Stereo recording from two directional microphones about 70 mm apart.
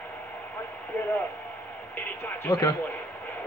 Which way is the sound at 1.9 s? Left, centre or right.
Left.